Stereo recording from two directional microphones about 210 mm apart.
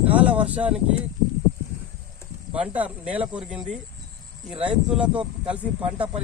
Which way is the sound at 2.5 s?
5° right (ahead or behind).